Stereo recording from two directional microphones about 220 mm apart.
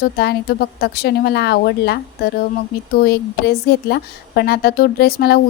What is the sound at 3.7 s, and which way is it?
Speech, 50° left (ahead or behind).